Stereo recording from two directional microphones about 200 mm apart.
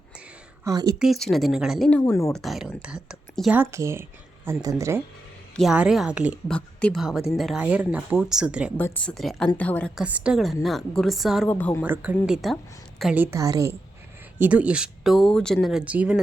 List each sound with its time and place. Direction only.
0.6 s a woman's voice: 15° right (ahead or behind)
0.9 s a woman's voice: centre (ahead or behind)
2.3 s a woman's voice: centre (ahead or behind)
5.5 s a woman's voice: 5° right (ahead or behind)
6.5 s a woman's voice: 5° left (ahead or behind)
10.0 s a woman's voice: 5° right (ahead or behind)
11.4 s a woman's voice: 10° left (ahead or behind)
11.8 s a woman's voice: 5° right (ahead or behind)